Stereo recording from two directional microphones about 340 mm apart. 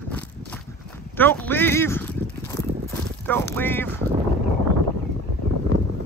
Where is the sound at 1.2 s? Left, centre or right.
Centre.